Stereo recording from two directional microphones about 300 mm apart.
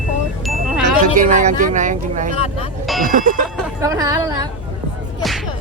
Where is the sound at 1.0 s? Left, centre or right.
Right.